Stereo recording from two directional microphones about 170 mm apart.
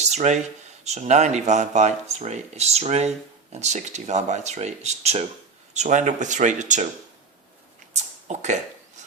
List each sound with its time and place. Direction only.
0.0 s speech: 40° right (ahead or behind)
8.3 s speech: 45° right (ahead or behind)